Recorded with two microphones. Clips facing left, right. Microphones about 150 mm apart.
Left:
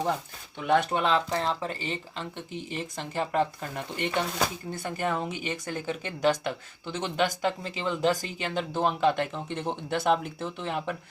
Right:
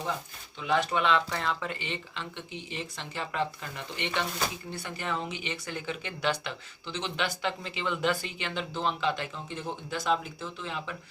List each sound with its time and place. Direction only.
0.6 s speech: 55° left (ahead or behind)